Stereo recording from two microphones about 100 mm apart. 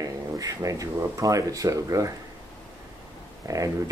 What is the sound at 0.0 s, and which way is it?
Speech, 35° right (ahead or behind).